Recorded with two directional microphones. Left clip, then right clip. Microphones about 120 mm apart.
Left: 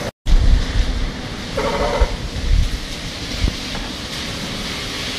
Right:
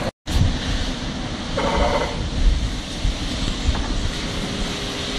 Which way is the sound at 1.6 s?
35° left (ahead or behind).